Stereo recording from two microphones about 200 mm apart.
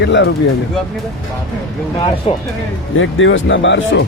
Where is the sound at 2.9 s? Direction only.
75° left (ahead or behind).